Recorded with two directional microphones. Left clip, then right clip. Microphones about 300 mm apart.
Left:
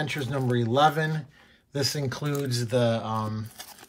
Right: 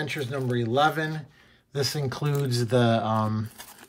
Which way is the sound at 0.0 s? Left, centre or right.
Centre.